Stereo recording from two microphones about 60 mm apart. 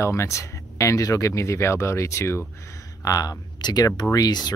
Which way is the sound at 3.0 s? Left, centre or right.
Left.